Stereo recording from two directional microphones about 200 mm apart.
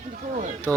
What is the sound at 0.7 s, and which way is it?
Speech, 15° right (ahead or behind).